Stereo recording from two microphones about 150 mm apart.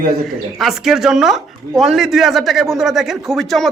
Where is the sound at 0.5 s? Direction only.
Centre (ahead or behind).